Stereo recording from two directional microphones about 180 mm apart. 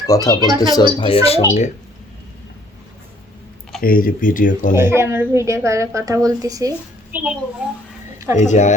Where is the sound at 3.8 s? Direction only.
50° left (ahead or behind).